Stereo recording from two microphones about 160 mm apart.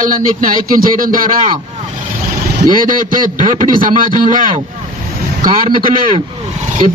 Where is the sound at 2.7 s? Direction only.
60° right (ahead or behind).